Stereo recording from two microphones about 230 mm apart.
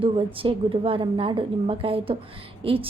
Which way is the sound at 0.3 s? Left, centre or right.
Right.